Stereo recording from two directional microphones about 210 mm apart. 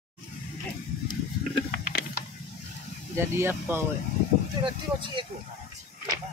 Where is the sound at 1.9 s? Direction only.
50° left (ahead or behind).